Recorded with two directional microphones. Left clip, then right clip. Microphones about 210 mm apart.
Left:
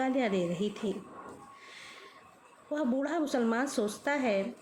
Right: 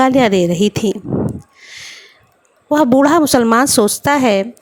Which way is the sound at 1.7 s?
50° right (ahead or behind).